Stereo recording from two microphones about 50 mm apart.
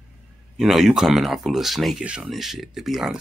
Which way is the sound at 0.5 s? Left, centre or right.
Centre.